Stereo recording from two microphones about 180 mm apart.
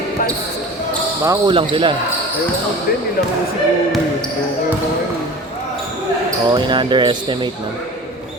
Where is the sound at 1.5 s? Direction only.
30° right (ahead or behind).